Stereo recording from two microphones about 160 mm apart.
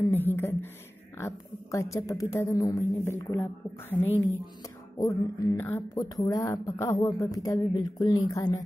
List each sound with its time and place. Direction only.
0.0 s a sound: 10° left (ahead or behind)
1.1 s a woman's voice: 15° left (ahead or behind)
4.9 s speech: 20° left (ahead or behind)